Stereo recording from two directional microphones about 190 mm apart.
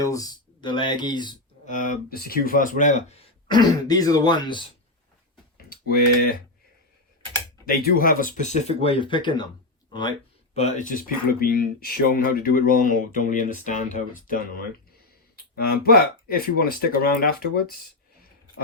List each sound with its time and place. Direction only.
0.0 s speech: 20° left (ahead or behind)
1.6 s speech: 45° left (ahead or behind)
3.8 s speech: 20° left (ahead or behind)
7.7 s speech: 50° left (ahead or behind); by 10.2 s 25° left (ahead or behind)
10.5 s speech: 40° left (ahead or behind)